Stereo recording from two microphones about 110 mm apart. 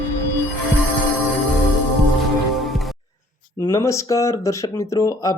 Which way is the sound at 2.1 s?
Centre (ahead or behind).